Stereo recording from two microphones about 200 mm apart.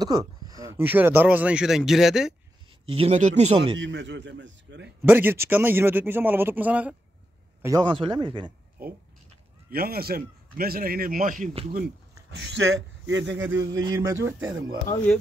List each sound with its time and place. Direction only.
0.0 s speech: 20° right (ahead or behind); by 2.3 s centre (ahead or behind)
2.9 s speech: 30° right (ahead or behind)
3.8 s a man's voice: 65° right (ahead or behind)
5.0 s speech: 10° right (ahead or behind)
7.6 s a man's voice: 20° right (ahead or behind)
8.8 s a man's voice: 50° right (ahead or behind)
12.3 s speech: 65° right (ahead or behind)
13.5 s speech: 15° right (ahead or behind)